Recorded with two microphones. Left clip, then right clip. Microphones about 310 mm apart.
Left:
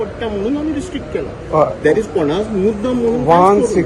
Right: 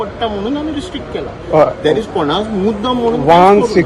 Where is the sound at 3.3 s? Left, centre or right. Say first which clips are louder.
Right 3 dB; right.